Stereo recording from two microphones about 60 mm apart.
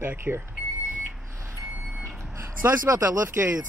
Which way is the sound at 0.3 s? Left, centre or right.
Right.